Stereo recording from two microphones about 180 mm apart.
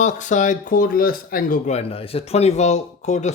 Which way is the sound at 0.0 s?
45° left (ahead or behind).